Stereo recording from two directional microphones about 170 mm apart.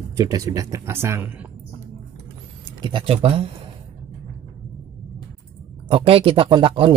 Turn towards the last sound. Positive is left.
turn(degrees=-30)  # may be behind; listen again after turning